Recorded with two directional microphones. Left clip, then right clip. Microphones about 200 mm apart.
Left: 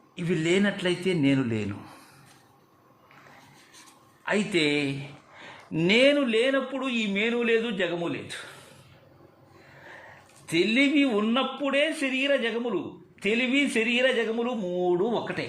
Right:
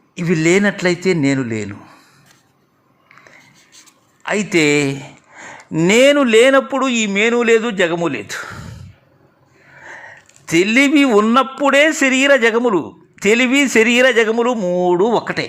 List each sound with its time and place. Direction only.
0.2 s a man's voice: 25° right (ahead or behind)
1.4 s speech: 15° right (ahead or behind)
4.2 s a man's voice: 25° right (ahead or behind)
5.4 s a sound: 25° right (ahead or behind)
5.9 s a man's voice: 35° right (ahead or behind)
10.4 s a man's voice: 30° right (ahead or behind)